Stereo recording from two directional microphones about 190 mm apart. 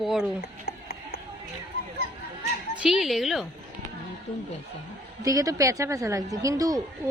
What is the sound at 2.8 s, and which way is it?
Speech, centre (ahead or behind).